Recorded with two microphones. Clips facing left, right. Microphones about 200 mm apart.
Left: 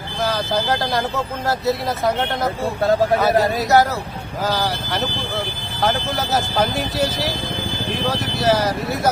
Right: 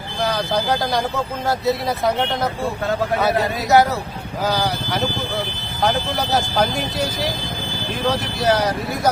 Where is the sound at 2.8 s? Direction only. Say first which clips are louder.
Left 6 dB; 35° left (ahead or behind).